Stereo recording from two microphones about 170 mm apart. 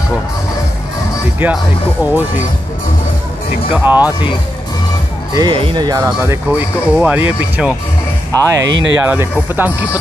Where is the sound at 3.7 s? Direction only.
10° right (ahead or behind).